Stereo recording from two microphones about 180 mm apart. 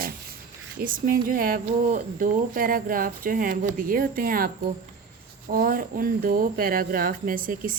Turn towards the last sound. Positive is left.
turn(degrees=-50)  # may be behind; listen again after turning